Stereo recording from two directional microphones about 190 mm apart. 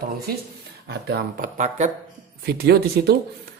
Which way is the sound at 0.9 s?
60° right (ahead or behind).